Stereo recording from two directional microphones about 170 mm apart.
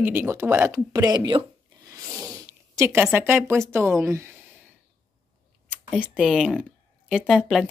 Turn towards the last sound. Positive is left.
turn(degrees=0)  # may be behind; listen again after turning